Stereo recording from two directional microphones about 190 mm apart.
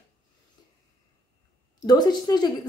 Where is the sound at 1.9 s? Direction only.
20° left (ahead or behind).